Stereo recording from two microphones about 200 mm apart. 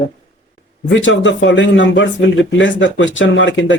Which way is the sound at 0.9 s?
70° left (ahead or behind).